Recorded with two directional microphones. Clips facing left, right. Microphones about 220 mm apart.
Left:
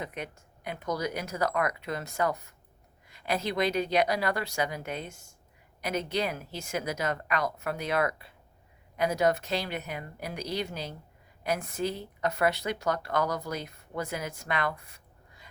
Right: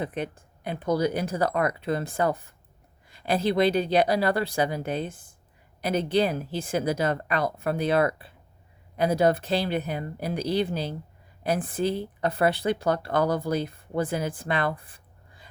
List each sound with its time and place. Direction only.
0.0 s speech: 30° right (ahead or behind)